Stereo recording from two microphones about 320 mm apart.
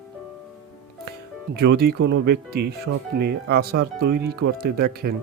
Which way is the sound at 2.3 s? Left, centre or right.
Right.